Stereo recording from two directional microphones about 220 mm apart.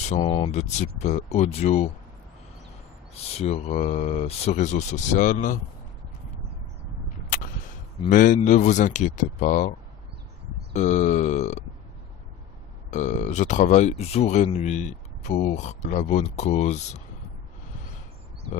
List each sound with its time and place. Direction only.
0.1 s speech: 25° left (ahead or behind)
3.3 s speech: 30° left (ahead or behind)
7.3 s a sound: 40° left (ahead or behind)
8.1 s speech: 35° left (ahead or behind)
10.8 s speech: 30° left (ahead or behind)
12.9 s speech: 35° left (ahead or behind)